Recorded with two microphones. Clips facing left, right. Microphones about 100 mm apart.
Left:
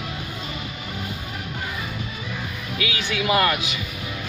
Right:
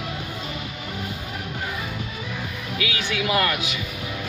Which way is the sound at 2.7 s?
15° left (ahead or behind).